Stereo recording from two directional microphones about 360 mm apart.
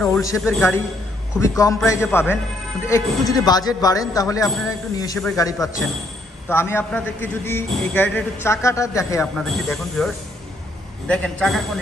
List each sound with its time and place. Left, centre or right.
0.0 s a man's voice: centre